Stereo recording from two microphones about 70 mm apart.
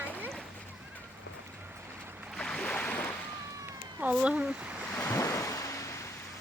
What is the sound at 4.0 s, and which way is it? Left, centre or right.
Speech, centre.